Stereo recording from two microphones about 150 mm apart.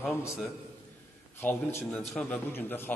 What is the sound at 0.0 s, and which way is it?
Speech, 15° left (ahead or behind).